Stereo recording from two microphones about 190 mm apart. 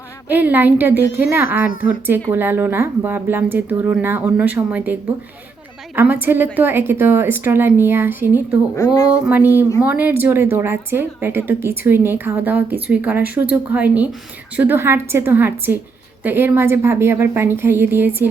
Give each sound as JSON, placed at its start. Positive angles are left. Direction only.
{"t": 0.3, "sound": "speech", "side_deg": -10}
{"t": 6.0, "sound": "speech", "side_deg": -10}
{"t": 8.7, "sound": "speech", "side_deg": 20}
{"t": 9.2, "sound": "speech", "side_deg": -10}